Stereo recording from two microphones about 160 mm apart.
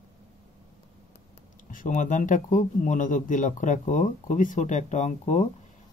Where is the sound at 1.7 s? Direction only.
55° left (ahead or behind).